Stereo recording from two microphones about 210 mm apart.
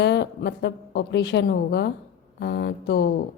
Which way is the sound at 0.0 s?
55° left (ahead or behind).